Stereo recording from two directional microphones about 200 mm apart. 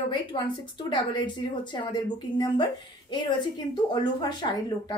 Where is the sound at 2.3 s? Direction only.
20° left (ahead or behind).